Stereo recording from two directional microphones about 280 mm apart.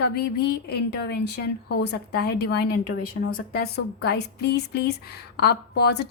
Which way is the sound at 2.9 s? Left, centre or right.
Left.